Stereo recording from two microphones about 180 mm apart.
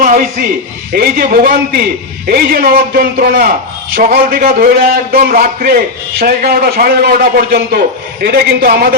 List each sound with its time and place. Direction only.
0.0 s a man's voice: 50° right (ahead or behind)